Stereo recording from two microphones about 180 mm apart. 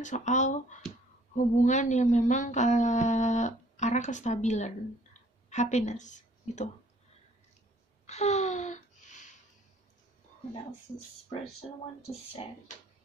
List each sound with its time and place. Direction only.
0.0 s a woman's voice: 40° left (ahead or behind)
8.1 s a sound: 35° left (ahead or behind)
12.0 s speech: 35° left (ahead or behind)